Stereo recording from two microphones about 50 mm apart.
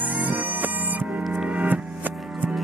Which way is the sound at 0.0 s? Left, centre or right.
Right.